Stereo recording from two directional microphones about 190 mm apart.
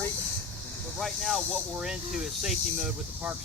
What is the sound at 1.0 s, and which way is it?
Speech, centre (ahead or behind).